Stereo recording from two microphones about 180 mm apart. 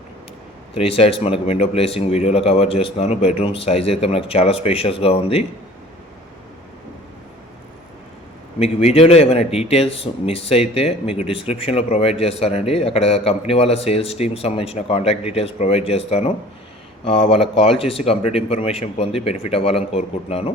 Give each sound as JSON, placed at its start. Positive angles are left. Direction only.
{"t": 0.7, "sound": "speech", "side_deg": 30}
{"t": 8.5, "sound": "speech", "side_deg": 35}